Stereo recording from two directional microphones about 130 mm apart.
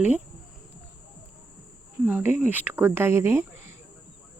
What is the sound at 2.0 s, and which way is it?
Speech, 10° right (ahead or behind).